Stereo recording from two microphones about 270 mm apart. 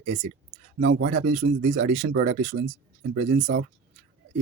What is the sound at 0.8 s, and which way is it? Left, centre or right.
Speech, right.